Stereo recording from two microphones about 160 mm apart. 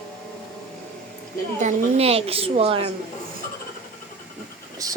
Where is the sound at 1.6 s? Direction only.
45° right (ahead or behind).